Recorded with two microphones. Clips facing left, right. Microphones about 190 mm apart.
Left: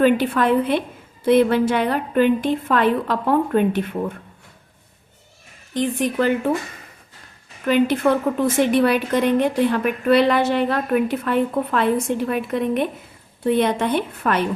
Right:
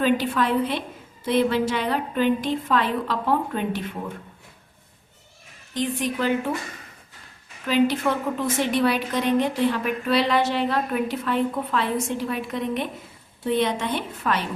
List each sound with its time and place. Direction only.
0.0 s a woman's voice: 55° left (ahead or behind)
5.7 s a woman's voice: 55° left (ahead or behind)
7.6 s a woman's voice: 55° left (ahead or behind)